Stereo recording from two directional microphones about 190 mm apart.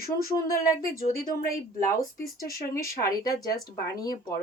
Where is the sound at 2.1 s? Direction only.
50° left (ahead or behind).